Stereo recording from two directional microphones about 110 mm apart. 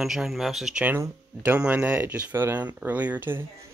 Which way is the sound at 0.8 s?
20° right (ahead or behind).